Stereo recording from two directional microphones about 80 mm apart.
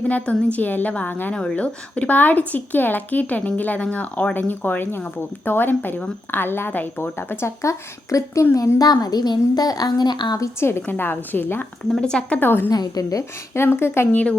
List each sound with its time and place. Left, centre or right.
0.1 s a woman's voice: centre; by 10.3 s left
10.3 s speech: left
11.9 s speech: centre
12.4 s speech: left
12.7 s a woman's voice: left
13.5 s speech: left